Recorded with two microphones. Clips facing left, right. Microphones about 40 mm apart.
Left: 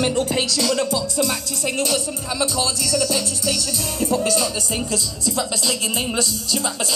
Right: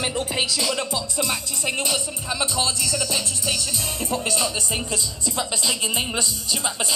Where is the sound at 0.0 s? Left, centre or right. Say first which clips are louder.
Left 4 dB; centre.